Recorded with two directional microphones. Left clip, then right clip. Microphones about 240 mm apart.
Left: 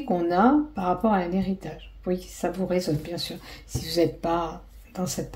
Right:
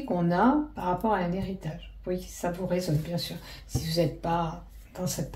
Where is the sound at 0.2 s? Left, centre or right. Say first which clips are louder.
Left 3 dB; left.